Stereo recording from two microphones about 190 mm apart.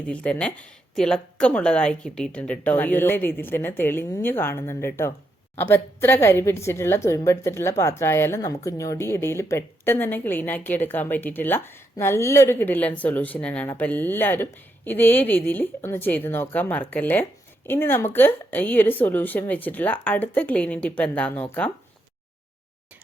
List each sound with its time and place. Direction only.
0.1 s a woman's voice: 5° left (ahead or behind)